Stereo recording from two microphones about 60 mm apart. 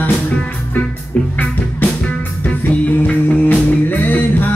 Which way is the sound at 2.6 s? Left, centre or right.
Left.